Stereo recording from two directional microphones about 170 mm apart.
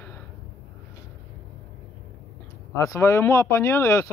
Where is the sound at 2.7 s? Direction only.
15° left (ahead or behind).